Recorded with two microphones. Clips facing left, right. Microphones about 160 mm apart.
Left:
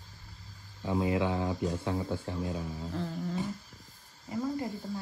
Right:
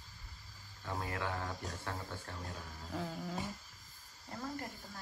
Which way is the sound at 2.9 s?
Centre (ahead or behind).